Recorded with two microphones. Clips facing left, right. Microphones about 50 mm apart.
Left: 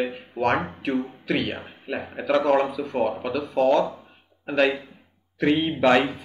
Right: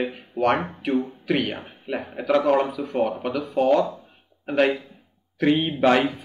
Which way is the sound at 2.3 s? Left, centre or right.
Centre.